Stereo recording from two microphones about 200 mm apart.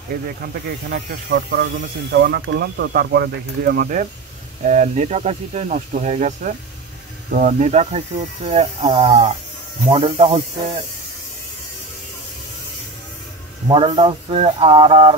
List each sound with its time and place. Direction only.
0.1 s speech: 45° right (ahead or behind); by 10.8 s 30° right (ahead or behind)
13.7 s speech: 25° right (ahead or behind)